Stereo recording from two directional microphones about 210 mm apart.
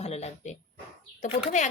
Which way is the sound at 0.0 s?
30° left (ahead or behind).